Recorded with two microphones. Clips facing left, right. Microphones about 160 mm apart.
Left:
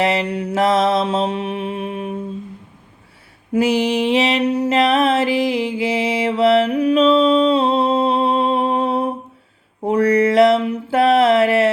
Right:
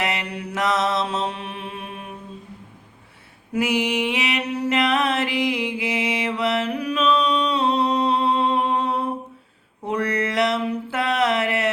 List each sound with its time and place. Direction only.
0.0 s music: 30° left (ahead or behind)
3.5 s mantra: 30° left (ahead or behind)
10.9 s a sound: 25° left (ahead or behind)